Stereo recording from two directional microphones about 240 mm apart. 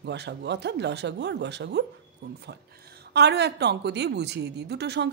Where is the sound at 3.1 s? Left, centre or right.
Right.